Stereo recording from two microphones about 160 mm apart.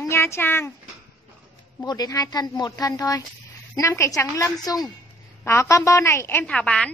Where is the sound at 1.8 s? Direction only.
25° left (ahead or behind).